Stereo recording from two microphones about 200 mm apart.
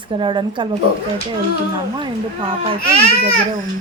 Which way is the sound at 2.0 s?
25° right (ahead or behind).